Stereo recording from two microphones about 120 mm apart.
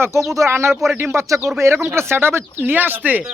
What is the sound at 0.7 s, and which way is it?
Speech, centre (ahead or behind).